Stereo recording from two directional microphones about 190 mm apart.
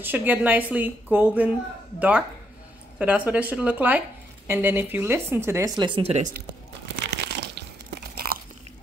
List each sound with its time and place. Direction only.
0.0 s speech: 10° right (ahead or behind); by 6.3 s 35° right (ahead or behind)
7.1 s crumpling: 60° right (ahead or behind)